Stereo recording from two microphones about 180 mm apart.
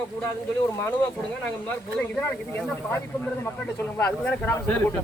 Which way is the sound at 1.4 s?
10° left (ahead or behind).